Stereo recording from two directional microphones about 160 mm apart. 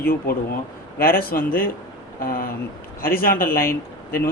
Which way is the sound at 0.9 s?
70° left (ahead or behind).